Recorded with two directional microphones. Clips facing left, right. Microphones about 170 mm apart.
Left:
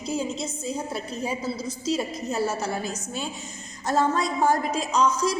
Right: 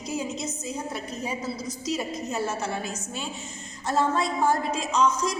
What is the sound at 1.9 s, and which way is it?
Speech, 35° left (ahead or behind).